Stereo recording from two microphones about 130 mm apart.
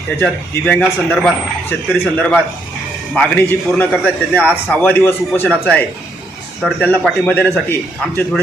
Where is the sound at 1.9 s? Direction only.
10° left (ahead or behind).